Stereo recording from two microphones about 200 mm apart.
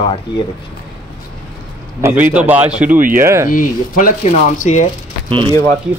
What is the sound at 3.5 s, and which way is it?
Speech, 40° left (ahead or behind).